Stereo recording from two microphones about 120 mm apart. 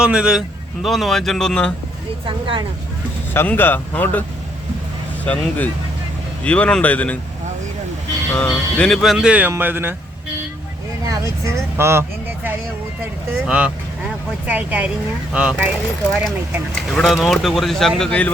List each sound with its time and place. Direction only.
0.0 s speech: 5° right (ahead or behind)
2.2 s speech: 45° right (ahead or behind)
3.3 s speech: 15° left (ahead or behind)
5.2 s speech: 15° left (ahead or behind)
8.4 s speech: 10° left (ahead or behind); by 9.9 s 15° right (ahead or behind)
11.0 s speech: 25° right (ahead or behind)
13.4 s speech: 10° right (ahead or behind)
16.9 s speech: centre (ahead or behind)